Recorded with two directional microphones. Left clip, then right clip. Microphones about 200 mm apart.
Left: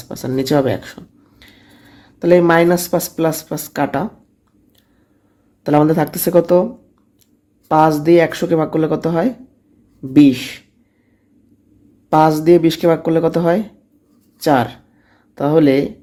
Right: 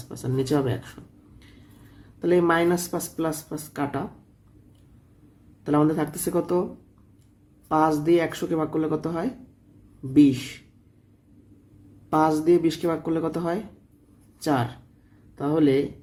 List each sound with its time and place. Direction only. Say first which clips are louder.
0.1 s speech: left 8 dB; 30° left (ahead or behind)
2.1 s speech: left 10 dB; 30° left (ahead or behind)
5.6 s speech: left 9 dB; 35° left (ahead or behind)
7.7 s speech: left 9 dB; 30° left (ahead or behind)
12.1 s speech: left 9 dB; 35° left (ahead or behind)